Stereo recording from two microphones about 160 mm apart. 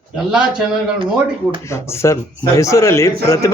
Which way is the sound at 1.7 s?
20° left (ahead or behind).